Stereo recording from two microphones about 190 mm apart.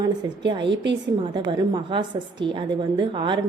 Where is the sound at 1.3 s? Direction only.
20° right (ahead or behind).